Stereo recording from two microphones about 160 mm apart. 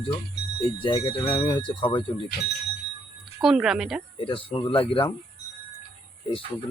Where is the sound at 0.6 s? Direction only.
35° left (ahead or behind).